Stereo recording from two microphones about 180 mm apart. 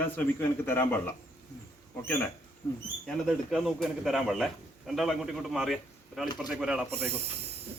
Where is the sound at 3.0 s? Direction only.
Centre (ahead or behind).